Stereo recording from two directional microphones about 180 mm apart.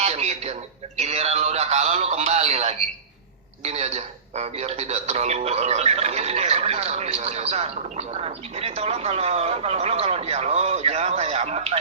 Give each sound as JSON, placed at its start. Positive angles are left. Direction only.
{"t": 0.0, "sound": "radio", "side_deg": -35}
{"t": 0.9, "sound": "a sound", "side_deg": -35}
{"t": 3.6, "sound": "speech", "side_deg": -35}